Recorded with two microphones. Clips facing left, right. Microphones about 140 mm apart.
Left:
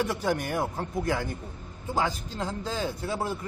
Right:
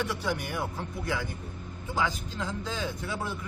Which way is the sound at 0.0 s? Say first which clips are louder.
Left 4 dB; 45° left (ahead or behind).